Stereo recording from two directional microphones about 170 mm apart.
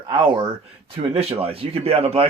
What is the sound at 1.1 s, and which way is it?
Speech, 35° right (ahead or behind).